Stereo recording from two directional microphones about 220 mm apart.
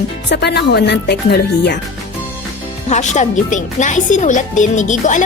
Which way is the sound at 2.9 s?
30° left (ahead or behind).